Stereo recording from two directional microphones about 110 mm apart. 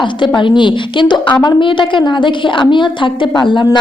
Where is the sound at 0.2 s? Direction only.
50° left (ahead or behind).